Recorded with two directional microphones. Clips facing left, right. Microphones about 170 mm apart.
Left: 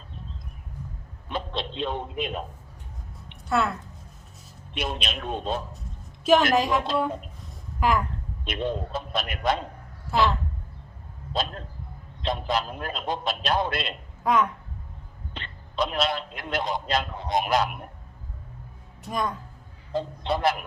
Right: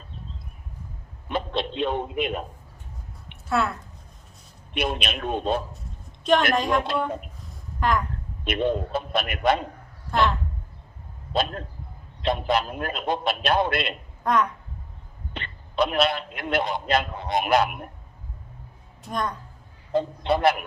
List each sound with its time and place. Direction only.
1.3 s a man's voice: 60° right (ahead or behind)
3.5 s speech: centre (ahead or behind)
4.7 s a man's voice: 60° right (ahead or behind)
5.7 s a sound: centre (ahead or behind)
6.5 s speech: 5° left (ahead or behind)
7.8 s speech: 5° left (ahead or behind)
8.4 s a man's voice: 60° right (ahead or behind)
10.1 s speech: 10° left (ahead or behind)
12.2 s a man's voice: 60° right (ahead or behind)
14.3 s speech: 5° left (ahead or behind)
15.3 s a man's voice: 60° right (ahead or behind)
19.0 s speech: 5° left (ahead or behind)
19.9 s a man's voice: 60° right (ahead or behind)